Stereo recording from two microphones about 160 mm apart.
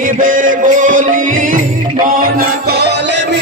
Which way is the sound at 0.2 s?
55° right (ahead or behind).